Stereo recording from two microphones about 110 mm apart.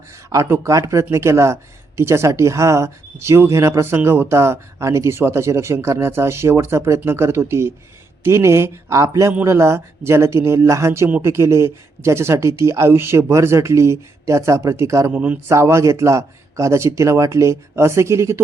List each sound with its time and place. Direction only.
0.3 s speech: 25° right (ahead or behind)
15.1 s speech: 15° right (ahead or behind)
15.4 s speech: 25° right (ahead or behind)